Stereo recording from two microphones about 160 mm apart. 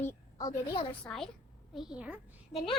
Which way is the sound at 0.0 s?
20° left (ahead or behind).